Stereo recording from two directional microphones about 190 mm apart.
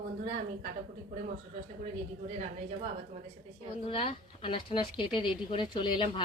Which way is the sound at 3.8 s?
30° left (ahead or behind).